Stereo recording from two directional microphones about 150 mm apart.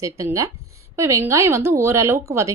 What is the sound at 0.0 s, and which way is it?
Speech, 20° right (ahead or behind).